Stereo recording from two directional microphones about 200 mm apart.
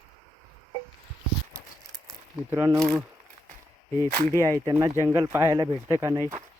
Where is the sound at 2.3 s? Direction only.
10° right (ahead or behind).